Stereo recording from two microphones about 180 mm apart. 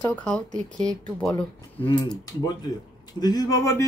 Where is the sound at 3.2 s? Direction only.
20° left (ahead or behind).